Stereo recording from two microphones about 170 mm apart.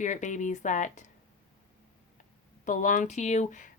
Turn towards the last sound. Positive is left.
turn(degrees=45)  # may be behind; listen again after turning